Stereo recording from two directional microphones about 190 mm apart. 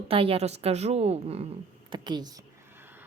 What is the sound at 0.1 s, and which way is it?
Speech, 30° right (ahead or behind).